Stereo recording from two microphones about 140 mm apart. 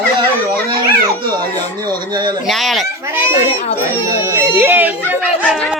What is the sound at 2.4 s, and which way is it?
Speech, centre (ahead or behind).